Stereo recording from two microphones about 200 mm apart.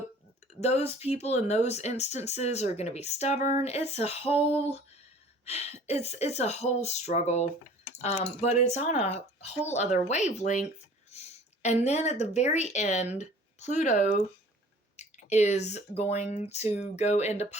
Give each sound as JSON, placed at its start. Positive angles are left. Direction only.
{"t": 0.6, "sound": "speech", "side_deg": 30}